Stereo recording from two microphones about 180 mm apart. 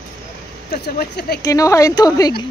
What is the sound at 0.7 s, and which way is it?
Speech, 55° left (ahead or behind).